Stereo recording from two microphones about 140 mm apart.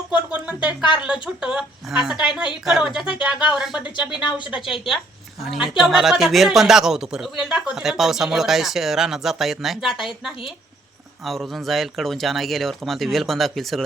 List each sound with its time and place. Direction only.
0.1 s speech: 10° right (ahead or behind)
4.2 s a woman's voice: 35° left (ahead or behind)
5.4 s speech: centre (ahead or behind)
11.2 s speech: centre (ahead or behind)